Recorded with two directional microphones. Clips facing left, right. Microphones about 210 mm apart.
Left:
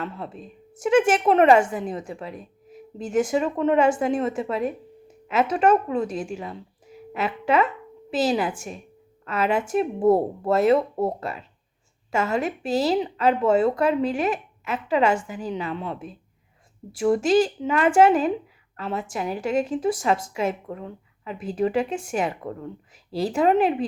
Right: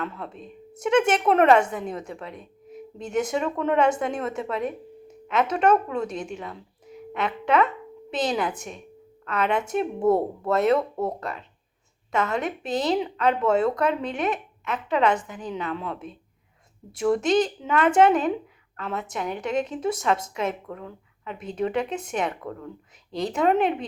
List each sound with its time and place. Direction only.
0.2 s a woman's voice: centre (ahead or behind)
10.0 s speech: 25° left (ahead or behind)
10.5 s a woman's voice: 5° left (ahead or behind)
10.8 s speech: 25° left (ahead or behind)
11.2 s a woman's voice: 5° left (ahead or behind)